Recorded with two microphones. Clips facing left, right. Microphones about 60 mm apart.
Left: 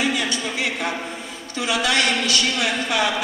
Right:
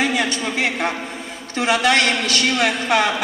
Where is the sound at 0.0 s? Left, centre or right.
Right.